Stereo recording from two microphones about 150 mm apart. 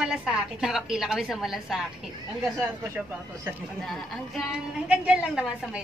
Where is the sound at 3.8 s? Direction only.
Centre (ahead or behind).